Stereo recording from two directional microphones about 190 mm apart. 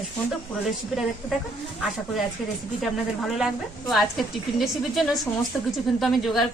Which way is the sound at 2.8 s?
Centre (ahead or behind).